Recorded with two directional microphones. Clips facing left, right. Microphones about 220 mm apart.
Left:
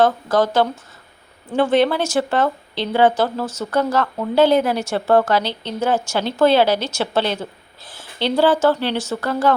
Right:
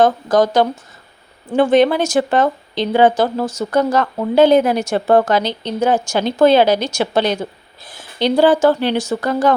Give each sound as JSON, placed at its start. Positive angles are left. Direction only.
{"t": 0.0, "sound": "speech", "side_deg": -15}